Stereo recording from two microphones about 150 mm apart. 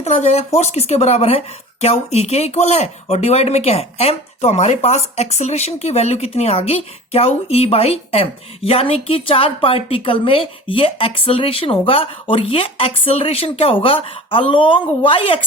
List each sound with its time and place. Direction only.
0.0 s a woman's voice: 45° left (ahead or behind)